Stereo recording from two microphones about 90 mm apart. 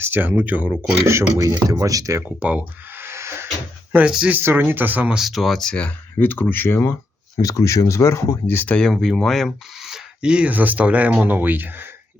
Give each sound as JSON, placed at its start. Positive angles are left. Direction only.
{"t": 0.0, "sound": "speech", "side_deg": -20}
{"t": 1.4, "sound": "speech", "side_deg": -40}
{"t": 2.2, "sound": "a sound", "side_deg": -15}
{"t": 3.9, "sound": "speech", "side_deg": -10}
{"t": 4.4, "sound": "speech", "side_deg": -25}
{"t": 5.1, "sound": "speech", "side_deg": 0}
{"t": 6.1, "sound": "speech", "side_deg": 20}
{"t": 7.4, "sound": "speech", "side_deg": 35}